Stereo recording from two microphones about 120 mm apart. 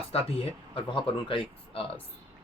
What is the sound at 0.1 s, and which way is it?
Speech, 55° left (ahead or behind).